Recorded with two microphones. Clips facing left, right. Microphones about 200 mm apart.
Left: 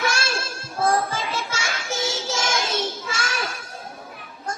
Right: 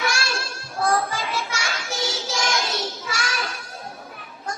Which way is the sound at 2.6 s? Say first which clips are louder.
Left 2 dB; 25° left (ahead or behind).